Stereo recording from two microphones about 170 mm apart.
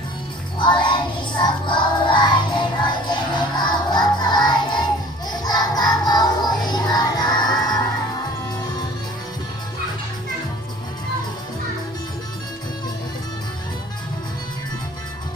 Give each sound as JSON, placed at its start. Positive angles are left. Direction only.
{"t": 0.6, "sound": "music", "side_deg": 25}